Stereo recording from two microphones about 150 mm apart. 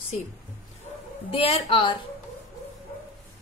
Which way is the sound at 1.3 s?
40° left (ahead or behind).